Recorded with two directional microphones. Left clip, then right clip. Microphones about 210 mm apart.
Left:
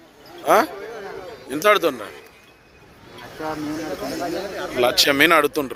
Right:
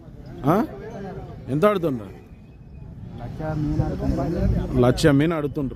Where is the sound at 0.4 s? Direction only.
5° right (ahead or behind).